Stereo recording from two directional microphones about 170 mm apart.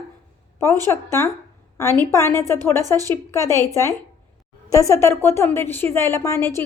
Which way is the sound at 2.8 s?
20° right (ahead or behind).